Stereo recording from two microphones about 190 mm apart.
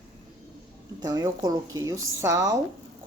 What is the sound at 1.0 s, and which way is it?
A woman's voice, 20° right (ahead or behind).